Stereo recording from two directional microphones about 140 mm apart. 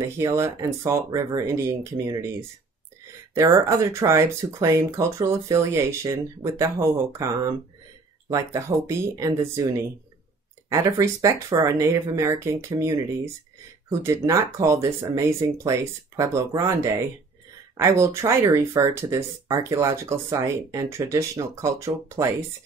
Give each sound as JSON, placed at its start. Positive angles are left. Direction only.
{"t": 0.2, "sound": "speech", "side_deg": -20}
{"t": 3.3, "sound": "speech", "side_deg": -20}
{"t": 8.3, "sound": "speech", "side_deg": -20}
{"t": 10.7, "sound": "speech", "side_deg": -25}